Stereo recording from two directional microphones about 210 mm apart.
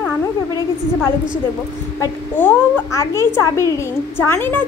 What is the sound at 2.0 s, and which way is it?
A woman's voice, 10° left (ahead or behind).